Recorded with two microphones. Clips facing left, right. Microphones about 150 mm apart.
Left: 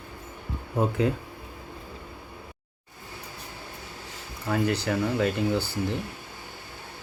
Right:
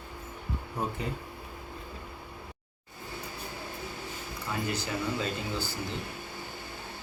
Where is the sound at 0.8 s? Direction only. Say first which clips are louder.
Left 10 dB; 90° left.